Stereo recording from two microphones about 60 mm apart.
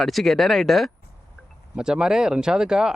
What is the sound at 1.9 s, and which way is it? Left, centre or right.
Speech, centre.